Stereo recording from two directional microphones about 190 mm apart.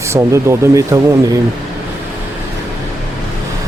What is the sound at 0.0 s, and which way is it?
Speech, 15° right (ahead or behind).